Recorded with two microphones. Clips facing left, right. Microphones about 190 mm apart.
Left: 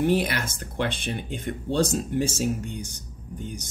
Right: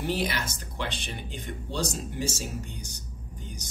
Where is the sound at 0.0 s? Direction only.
55° left (ahead or behind).